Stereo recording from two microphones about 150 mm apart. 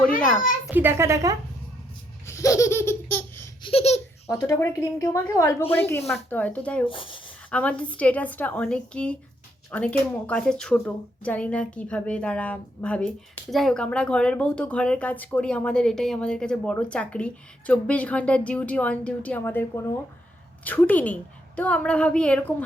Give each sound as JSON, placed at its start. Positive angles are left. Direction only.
{"t": 0.7, "sound": "a child's voice", "side_deg": -15}
{"t": 2.2, "sound": "laughter", "side_deg": 20}
{"t": 3.6, "sound": "baby laughter", "side_deg": 40}
{"t": 4.3, "sound": "a woman's voice", "side_deg": 20}
{"t": 6.8, "sound": "speech", "side_deg": 35}
{"t": 7.5, "sound": "a woman's voice", "side_deg": 10}